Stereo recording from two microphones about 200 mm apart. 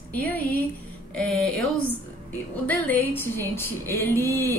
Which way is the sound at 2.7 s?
10° left (ahead or behind).